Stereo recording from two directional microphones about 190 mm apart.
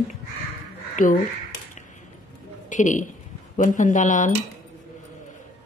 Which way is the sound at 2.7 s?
40° left (ahead or behind).